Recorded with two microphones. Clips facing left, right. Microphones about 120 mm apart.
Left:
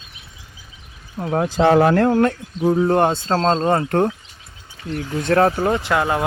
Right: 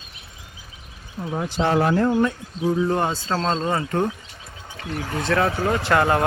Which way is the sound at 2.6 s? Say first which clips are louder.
Left 5 dB; 45° left (ahead or behind).